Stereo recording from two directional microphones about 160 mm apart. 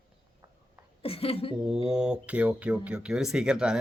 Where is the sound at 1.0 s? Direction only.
35° left (ahead or behind).